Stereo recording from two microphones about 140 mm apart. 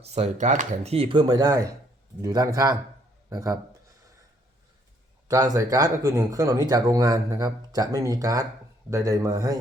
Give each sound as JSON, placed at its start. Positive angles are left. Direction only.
{"t": 0.0, "sound": "speech", "side_deg": -50}
{"t": 0.9, "sound": "speech", "side_deg": -35}
{"t": 5.3, "sound": "speech", "side_deg": -25}